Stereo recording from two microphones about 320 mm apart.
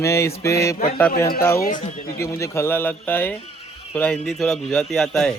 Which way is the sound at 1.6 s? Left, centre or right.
Left.